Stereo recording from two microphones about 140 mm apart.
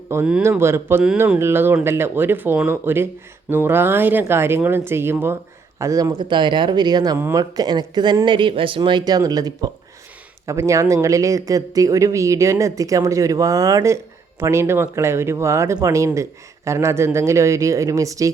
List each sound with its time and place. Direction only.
0.1 s speech: 15° right (ahead or behind)
7.2 s speech: 15° right (ahead or behind)
7.5 s speech: 30° right (ahead or behind)